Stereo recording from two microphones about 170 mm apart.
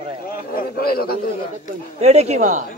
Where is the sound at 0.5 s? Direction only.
65° left (ahead or behind).